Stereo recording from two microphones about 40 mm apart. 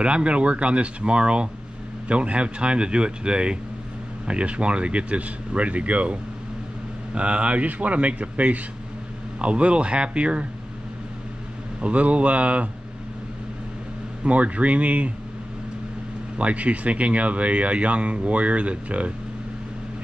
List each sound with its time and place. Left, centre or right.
0.0 s speech: right
7.2 s speech: right
11.8 s speech: right
14.2 s speech: right
16.3 s speech: right